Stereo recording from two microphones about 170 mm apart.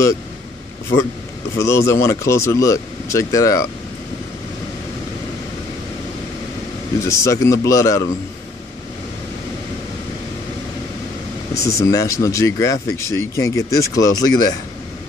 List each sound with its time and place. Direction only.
1.6 s speech: 15° left (ahead or behind)
7.0 s speech: 15° left (ahead or behind)
11.5 s speech: 20° left (ahead or behind)